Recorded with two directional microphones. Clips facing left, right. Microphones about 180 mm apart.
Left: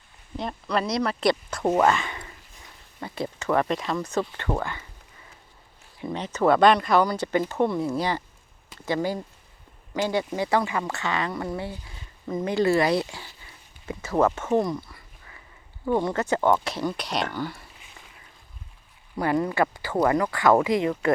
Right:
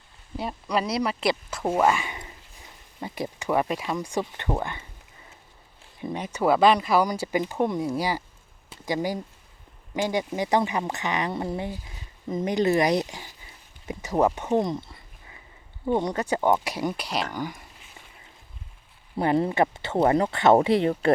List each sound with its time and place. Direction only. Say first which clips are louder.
0.3 s speech: even; 5° right (ahead or behind)
6.1 s speech: left 2 dB; 10° right (ahead or behind)
19.1 s speech: right 1 dB; 25° right (ahead or behind)